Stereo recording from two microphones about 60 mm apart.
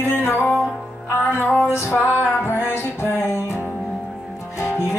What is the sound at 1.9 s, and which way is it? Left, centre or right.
Music, left.